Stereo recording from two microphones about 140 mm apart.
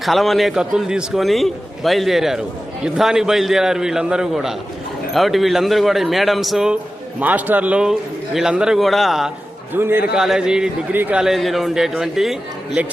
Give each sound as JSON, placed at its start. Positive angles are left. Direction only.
{"t": 0.0, "sound": "a man's voice", "side_deg": 0}
{"t": 9.7, "sound": "a man's voice", "side_deg": -15}
{"t": 10.2, "sound": "a man's voice", "side_deg": -5}